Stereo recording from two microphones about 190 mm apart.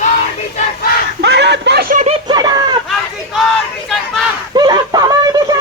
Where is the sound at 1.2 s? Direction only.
65° right (ahead or behind).